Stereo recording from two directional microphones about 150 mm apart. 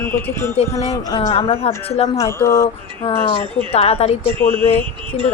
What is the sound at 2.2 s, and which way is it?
Speech, 20° left (ahead or behind).